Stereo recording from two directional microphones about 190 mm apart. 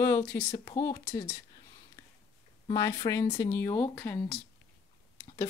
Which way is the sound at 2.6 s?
20° left (ahead or behind).